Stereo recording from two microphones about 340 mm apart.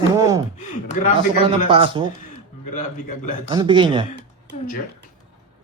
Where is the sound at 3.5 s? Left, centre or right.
Centre.